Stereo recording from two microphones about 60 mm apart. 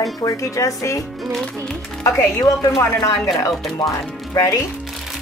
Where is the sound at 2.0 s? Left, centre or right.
Left.